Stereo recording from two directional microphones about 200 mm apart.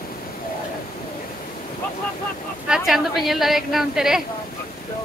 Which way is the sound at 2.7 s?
Centre (ahead or behind).